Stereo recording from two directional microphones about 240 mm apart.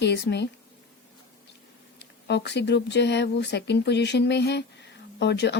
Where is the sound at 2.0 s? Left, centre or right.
Left.